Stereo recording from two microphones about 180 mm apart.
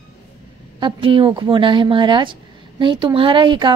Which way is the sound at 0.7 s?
30° right (ahead or behind).